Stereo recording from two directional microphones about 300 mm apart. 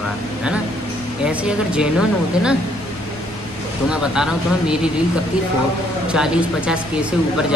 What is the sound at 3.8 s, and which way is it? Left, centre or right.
Speech, centre.